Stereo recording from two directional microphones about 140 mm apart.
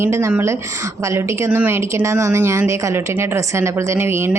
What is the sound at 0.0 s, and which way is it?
A woman's voice, 20° right (ahead or behind).